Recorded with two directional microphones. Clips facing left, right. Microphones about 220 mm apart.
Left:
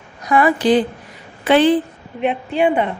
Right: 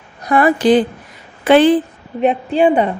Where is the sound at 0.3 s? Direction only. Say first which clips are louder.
Right 3 dB; 40° right (ahead or behind).